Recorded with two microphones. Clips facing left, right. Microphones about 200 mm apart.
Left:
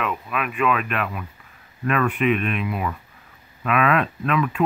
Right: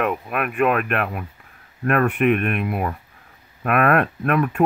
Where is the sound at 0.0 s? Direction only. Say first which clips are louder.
Right 4 dB; 55° right (ahead or behind).